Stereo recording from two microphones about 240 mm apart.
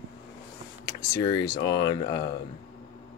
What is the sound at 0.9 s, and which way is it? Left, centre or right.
Speech, centre.